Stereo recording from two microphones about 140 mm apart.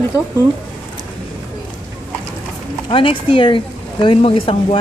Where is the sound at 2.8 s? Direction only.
40° left (ahead or behind).